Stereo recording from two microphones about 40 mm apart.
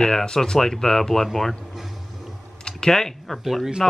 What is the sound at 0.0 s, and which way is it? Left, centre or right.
Speech, centre.